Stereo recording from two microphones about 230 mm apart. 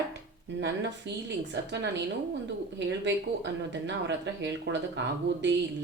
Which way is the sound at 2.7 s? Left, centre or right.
Right.